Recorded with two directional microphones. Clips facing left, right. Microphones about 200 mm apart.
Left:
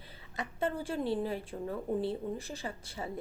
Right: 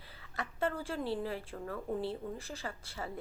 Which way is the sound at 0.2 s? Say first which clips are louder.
Left 1 dB; 20° left (ahead or behind).